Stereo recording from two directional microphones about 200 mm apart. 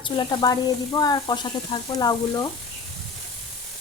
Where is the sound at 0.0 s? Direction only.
20° left (ahead or behind).